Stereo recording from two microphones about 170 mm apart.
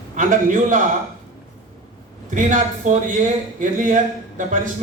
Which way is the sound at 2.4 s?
50° right (ahead or behind).